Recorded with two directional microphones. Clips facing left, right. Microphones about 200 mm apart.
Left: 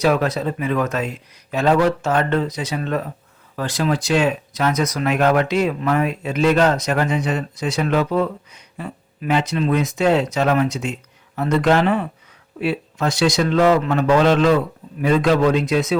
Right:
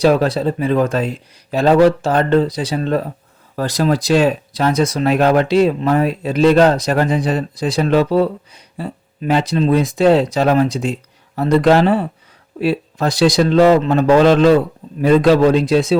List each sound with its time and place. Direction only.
0.0 s speech: 30° right (ahead or behind)